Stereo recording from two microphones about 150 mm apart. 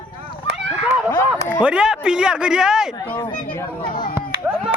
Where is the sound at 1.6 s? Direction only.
5° right (ahead or behind).